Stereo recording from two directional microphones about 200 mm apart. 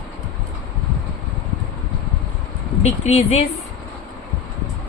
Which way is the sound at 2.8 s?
30° left (ahead or behind).